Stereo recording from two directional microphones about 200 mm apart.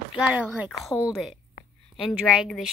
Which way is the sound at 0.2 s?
5° right (ahead or behind).